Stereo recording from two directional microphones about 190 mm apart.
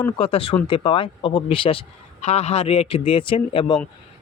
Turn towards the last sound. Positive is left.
turn(degrees=25)  # may be behind; listen again after turning